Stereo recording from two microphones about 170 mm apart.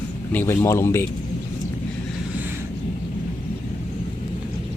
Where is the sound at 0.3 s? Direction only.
15° left (ahead or behind).